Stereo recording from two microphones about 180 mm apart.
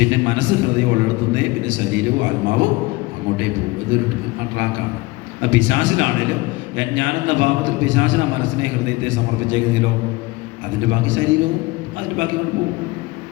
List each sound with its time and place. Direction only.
0.0 s a man's voice: 90° right
5.4 s a man's voice: 90° right